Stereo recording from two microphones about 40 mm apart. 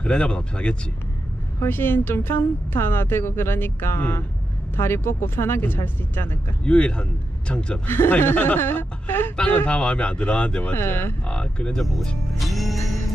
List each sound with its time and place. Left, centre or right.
0.0 s speech: left
1.6 s speech: left
5.6 s speech: left
6.6 s speech: left
8.2 s speech: left
9.7 s speech: left
10.7 s speech: left
11.2 s speech: left
11.8 s speech: centre
12.4 s music: centre